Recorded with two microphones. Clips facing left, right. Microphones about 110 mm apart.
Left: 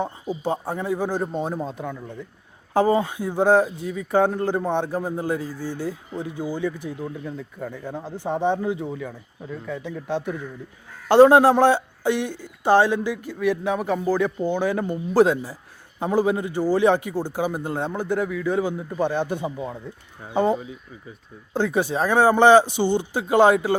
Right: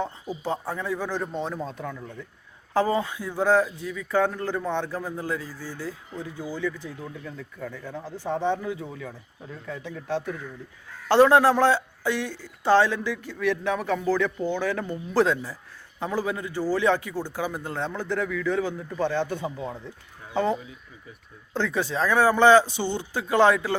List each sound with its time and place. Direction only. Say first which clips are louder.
0.0 s speech: left 4 dB; 15° left (ahead or behind)
1.0 s speech: left 5 dB; 45° left (ahead or behind)
1.3 s speech: left 4 dB; 15° left (ahead or behind)
5.5 s speech: left 7 dB; 50° left (ahead or behind)
5.7 s speech: left 5 dB; 20° left (ahead or behind)